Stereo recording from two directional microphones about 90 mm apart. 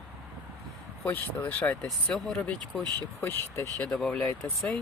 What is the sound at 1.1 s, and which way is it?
Speech, 20° left (ahead or behind).